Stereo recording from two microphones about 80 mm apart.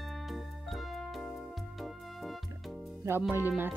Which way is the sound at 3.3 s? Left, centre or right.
Right.